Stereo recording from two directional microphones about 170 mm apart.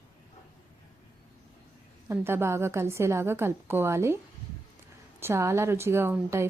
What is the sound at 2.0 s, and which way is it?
A woman's voice, 15° right (ahead or behind).